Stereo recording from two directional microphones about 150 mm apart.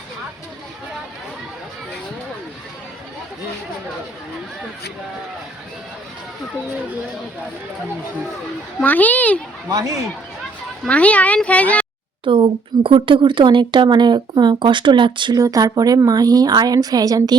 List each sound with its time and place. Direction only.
8.8 s speech: 10° left (ahead or behind)
9.6 s speech: 25° right (ahead or behind)
10.8 s speech: 10° left (ahead or behind)
12.2 s speech: 35° right (ahead or behind)